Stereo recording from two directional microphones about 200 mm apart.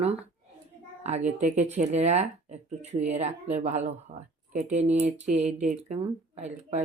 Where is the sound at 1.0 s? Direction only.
35° right (ahead or behind).